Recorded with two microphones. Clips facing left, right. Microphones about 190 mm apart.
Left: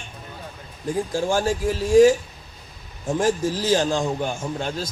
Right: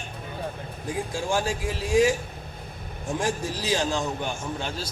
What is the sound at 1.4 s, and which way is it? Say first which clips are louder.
Speech: left 6 dB; 45° left (ahead or behind).